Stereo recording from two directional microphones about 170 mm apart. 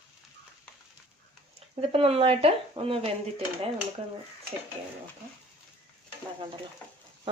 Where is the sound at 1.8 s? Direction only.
35° right (ahead or behind).